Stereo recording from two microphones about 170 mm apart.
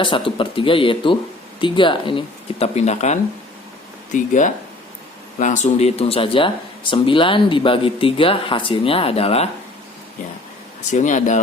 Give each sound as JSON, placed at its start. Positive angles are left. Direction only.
{"t": 0.0, "sound": "speech", "side_deg": 30}
{"t": 10.9, "sound": "speech", "side_deg": 45}